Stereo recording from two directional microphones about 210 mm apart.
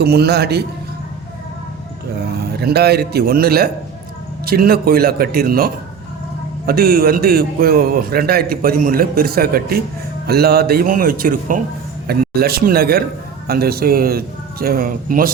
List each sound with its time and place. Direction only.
0.0 s a man's voice: 50° right (ahead or behind)
2.4 s a man's voice: 50° right (ahead or behind)